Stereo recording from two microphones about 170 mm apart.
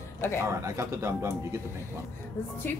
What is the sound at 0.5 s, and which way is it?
A man's voice, 20° right (ahead or behind).